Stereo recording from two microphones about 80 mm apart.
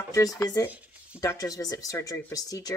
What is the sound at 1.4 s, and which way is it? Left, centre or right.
Speech, left.